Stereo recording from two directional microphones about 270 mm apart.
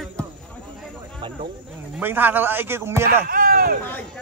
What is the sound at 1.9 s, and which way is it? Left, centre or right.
Speech, centre.